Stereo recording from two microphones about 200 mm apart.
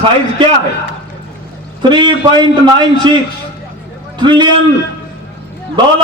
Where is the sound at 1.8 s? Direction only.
20° right (ahead or behind).